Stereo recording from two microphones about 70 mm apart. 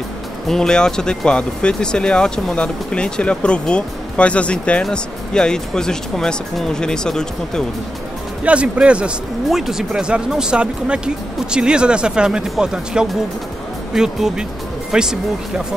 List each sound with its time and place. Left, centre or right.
0.5 s speech: centre
8.5 s speech: centre
9.5 s speech: centre